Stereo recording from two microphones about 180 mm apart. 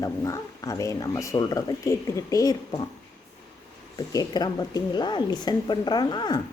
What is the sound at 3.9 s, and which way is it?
Speech, 20° left (ahead or behind).